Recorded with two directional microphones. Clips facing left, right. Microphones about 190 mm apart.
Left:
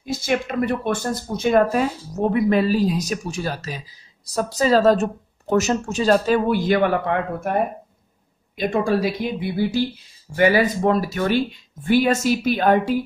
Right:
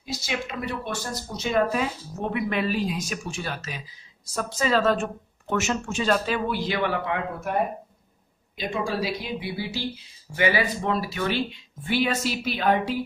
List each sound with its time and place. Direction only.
0.0 s speech: 50° left (ahead or behind)
8.5 s speech: 50° left (ahead or behind)